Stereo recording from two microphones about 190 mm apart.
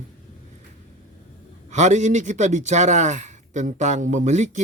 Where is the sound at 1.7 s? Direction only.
40° right (ahead or behind).